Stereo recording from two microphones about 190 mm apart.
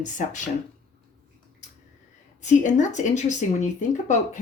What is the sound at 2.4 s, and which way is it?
Speech, 40° left (ahead or behind).